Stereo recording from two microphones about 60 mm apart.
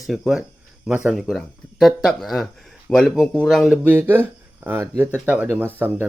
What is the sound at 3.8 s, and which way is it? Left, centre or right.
Speech, right.